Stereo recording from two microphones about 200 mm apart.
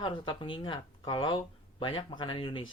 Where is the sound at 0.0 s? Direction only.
25° left (ahead or behind).